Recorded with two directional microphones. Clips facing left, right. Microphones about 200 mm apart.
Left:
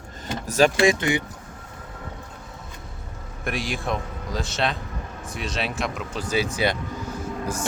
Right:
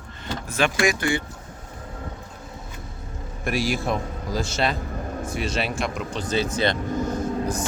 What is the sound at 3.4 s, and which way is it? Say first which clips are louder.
Speech: right 4 dB; centre (ahead or behind).